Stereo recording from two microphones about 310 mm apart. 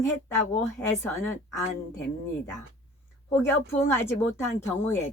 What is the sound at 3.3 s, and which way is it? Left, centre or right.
Speech, centre.